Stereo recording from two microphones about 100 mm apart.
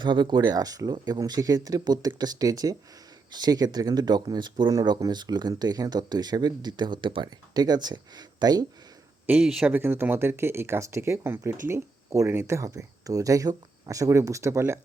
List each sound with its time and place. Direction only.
0.0 s speech: 50° right (ahead or behind)
4.7 s speech: 35° right (ahead or behind)
9.4 s speech: 5° right (ahead or behind)
9.7 s speech: 25° right (ahead or behind)